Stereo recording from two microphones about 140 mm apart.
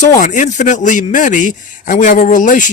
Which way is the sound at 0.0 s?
65° left (ahead or behind).